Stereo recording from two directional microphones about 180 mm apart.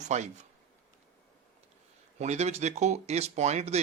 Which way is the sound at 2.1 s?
40° right (ahead or behind).